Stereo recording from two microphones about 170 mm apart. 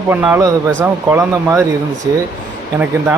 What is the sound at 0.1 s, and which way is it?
Speech, 10° right (ahead or behind).